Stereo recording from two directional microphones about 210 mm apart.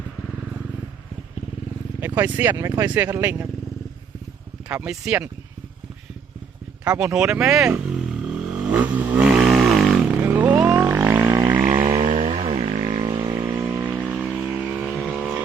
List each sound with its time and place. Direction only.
2.0 s speech: 10° right (ahead or behind)
4.7 s speech: 5° right (ahead or behind)
7.0 s vehicle: 5° right (ahead or behind); by 12.7 s 25° right (ahead or behind)
12.8 s a sound: 25° right (ahead or behind)
13.5 s vehicle: 10° right (ahead or behind)